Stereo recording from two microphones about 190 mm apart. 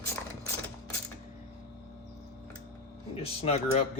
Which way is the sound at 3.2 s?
35° left (ahead or behind).